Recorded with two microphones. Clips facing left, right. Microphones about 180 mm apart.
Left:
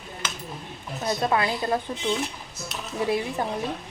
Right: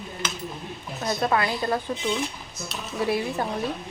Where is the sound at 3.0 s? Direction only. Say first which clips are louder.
Even; 20° left (ahead or behind).